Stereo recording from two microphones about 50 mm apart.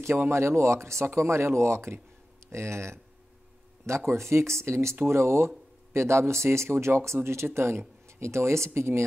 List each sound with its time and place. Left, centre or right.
0.0 s speech: right